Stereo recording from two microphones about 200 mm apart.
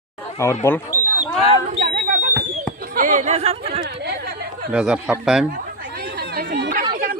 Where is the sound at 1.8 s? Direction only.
45° right (ahead or behind).